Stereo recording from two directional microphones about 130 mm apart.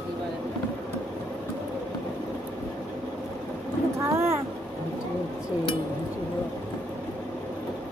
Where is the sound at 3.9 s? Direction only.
20° right (ahead or behind).